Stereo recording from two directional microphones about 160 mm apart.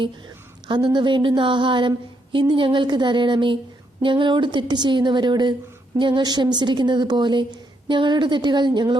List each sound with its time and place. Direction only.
0.7 s a woman's voice: 30° right (ahead or behind)